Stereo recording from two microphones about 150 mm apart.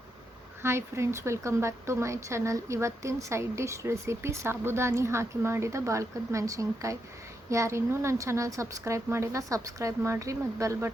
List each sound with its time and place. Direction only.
0.6 s a woman's voice: 15° right (ahead or behind)